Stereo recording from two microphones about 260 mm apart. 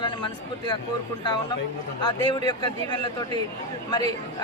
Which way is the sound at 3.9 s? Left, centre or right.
Centre.